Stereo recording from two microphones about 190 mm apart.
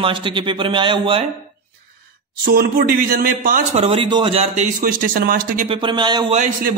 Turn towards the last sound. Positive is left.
turn(degrees=-45)  # may be behind; listen again after turning